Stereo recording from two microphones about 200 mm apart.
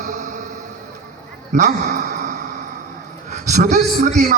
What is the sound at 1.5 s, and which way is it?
Speech, 35° right (ahead or behind).